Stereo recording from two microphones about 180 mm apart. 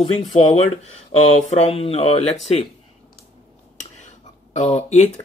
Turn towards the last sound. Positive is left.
turn(degrees=40)  # may be behind; listen again after turning